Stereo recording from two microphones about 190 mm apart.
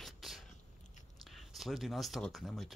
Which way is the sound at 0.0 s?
Centre (ahead or behind).